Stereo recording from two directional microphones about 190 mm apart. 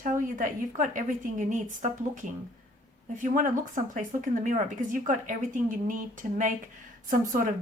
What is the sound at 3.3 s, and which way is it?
Speech, 45° right (ahead or behind).